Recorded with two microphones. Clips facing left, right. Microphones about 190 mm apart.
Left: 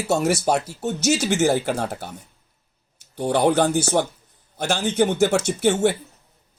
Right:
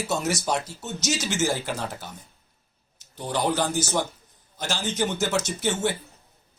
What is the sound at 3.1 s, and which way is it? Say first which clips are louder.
A man's voice: left 7 dB; 60° left (ahead or behind).